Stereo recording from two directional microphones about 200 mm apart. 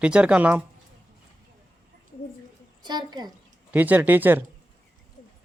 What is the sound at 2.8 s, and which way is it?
Speech, 20° right (ahead or behind).